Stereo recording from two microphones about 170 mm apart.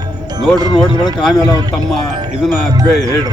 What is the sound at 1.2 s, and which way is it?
A man's voice, centre (ahead or behind).